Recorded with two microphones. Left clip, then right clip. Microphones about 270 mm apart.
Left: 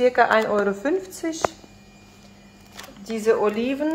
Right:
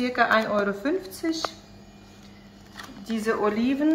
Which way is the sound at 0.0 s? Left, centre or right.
Left.